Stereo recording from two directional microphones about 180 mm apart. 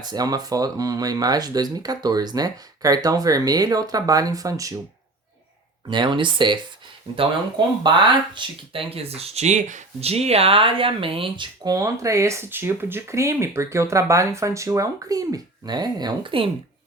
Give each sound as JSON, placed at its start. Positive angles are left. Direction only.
{"t": 0.0, "sound": "speech", "side_deg": -20}
{"t": 5.9, "sound": "speech", "side_deg": -25}